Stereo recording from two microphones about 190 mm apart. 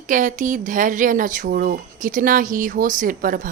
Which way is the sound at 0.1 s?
40° right (ahead or behind).